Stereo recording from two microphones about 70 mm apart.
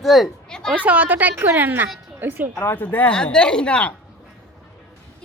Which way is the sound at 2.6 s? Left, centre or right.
Left.